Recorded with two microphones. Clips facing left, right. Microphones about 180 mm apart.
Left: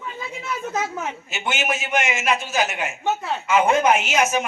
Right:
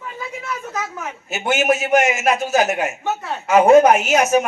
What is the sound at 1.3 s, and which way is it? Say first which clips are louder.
A man's voice: right 9 dB; 40° right (ahead or behind).